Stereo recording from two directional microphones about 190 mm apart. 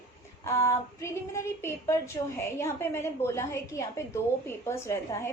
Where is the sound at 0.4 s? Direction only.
15° left (ahead or behind).